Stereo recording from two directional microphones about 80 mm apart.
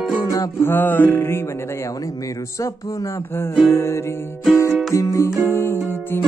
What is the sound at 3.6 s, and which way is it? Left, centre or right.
Music, left.